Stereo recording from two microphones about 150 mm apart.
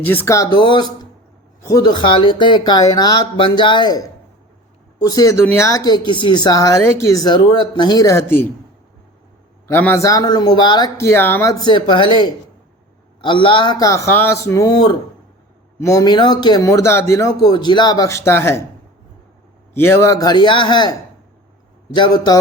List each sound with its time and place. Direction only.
0.0 s speech: 10° left (ahead or behind)
9.6 s speech: 15° left (ahead or behind)
19.7 s speech: 15° left (ahead or behind)
21.9 s speech: 30° left (ahead or behind)